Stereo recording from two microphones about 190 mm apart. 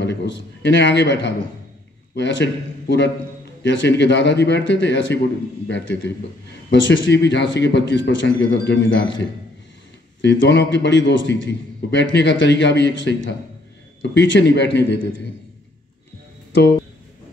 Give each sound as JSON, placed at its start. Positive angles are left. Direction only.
{"t": 0.0, "sound": "a man's voice", "side_deg": 65}